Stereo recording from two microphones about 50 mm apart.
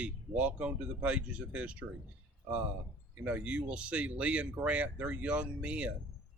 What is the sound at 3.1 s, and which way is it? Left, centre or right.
Speech, right.